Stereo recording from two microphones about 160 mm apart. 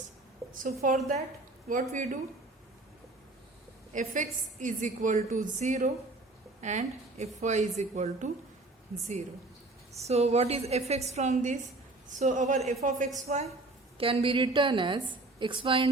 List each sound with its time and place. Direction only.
0.6 s a woman's voice: 60° right (ahead or behind)
3.9 s a woman's voice: 55° right (ahead or behind)
10.1 s a woman's voice: 40° right (ahead or behind)